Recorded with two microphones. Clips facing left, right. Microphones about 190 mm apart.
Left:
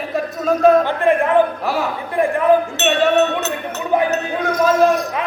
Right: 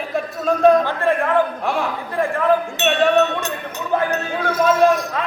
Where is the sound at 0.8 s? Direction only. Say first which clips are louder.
Left 3 dB; 20° left (ahead or behind).